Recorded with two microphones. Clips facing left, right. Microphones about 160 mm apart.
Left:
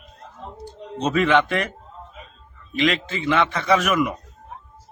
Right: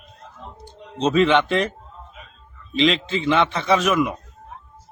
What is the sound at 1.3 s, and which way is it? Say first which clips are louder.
Speech: right 1 dB; centre (ahead or behind).